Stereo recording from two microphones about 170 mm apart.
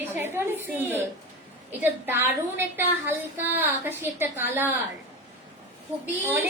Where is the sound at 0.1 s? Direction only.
15° right (ahead or behind).